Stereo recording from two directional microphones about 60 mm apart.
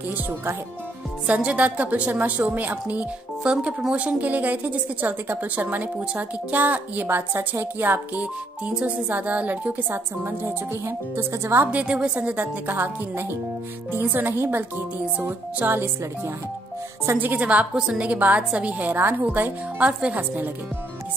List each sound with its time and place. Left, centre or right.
1.2 s speech: centre
3.4 s speech: centre; by 8.2 s right
8.2 s speech: right
9.8 s speech: right
11.6 s speech: right
15.6 s speech: right
17.2 s speech: right
18.9 s speech: right
19.9 s a woman's voice: centre